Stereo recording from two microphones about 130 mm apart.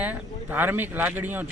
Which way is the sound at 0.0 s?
15° right (ahead or behind).